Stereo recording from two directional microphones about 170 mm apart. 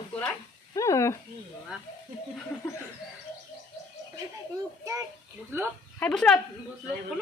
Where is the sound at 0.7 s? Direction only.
20° left (ahead or behind).